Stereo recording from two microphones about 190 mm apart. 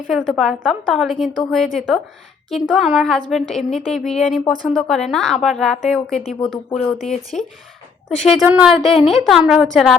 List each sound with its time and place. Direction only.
0.1 s a woman's voice: centre (ahead or behind)